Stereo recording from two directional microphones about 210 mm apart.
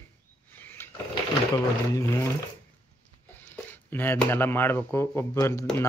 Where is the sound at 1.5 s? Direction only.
15° left (ahead or behind).